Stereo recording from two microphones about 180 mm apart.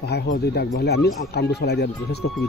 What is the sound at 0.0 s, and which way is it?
Speech, 65° left (ahead or behind).